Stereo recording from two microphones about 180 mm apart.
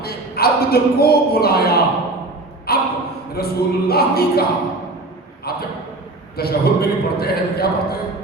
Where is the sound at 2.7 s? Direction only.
60° left (ahead or behind).